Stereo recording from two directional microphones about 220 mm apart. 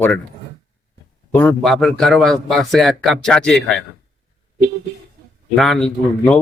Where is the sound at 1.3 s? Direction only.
5° left (ahead or behind).